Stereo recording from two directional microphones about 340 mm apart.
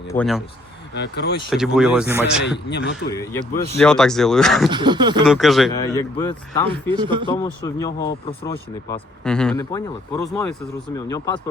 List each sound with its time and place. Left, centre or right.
0.1 s speech: centre
0.9 s speech: left
1.5 s speech: centre
2.4 s a man's voice: left
3.1 s speech: centre
4.7 s speech: centre
5.2 s speech: centre
6.9 s speech: centre
7.8 s speech: centre